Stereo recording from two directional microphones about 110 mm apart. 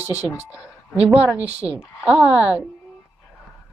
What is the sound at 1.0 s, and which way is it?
A woman's voice, 20° right (ahead or behind).